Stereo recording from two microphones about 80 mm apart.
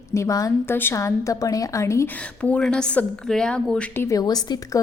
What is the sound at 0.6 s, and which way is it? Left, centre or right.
A woman's voice, left.